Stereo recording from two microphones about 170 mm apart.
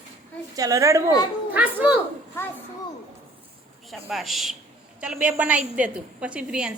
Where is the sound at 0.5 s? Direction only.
20° right (ahead or behind).